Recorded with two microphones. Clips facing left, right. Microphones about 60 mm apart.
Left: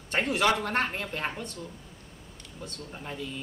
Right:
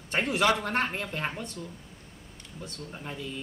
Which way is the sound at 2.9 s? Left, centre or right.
Centre.